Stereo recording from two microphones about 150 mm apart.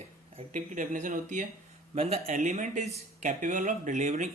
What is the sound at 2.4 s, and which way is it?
Speech, 55° right (ahead or behind).